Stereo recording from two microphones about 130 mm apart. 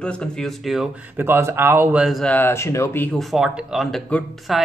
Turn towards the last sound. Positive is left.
turn(degrees=0)  # may be behind; listen again after turning